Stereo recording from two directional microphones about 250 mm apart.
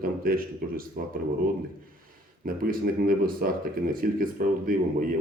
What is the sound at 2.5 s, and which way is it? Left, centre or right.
Speech, right.